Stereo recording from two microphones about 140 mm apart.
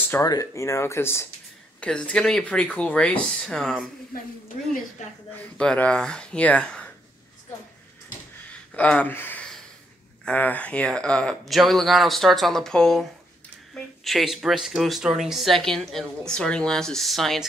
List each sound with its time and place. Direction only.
0.1 s speech: 25° left (ahead or behind); by 3.8 s centre (ahead or behind)
5.0 s speech: 55° left (ahead or behind)
5.3 s speech: 10° left (ahead or behind)
8.7 s speech: 10° left (ahead or behind)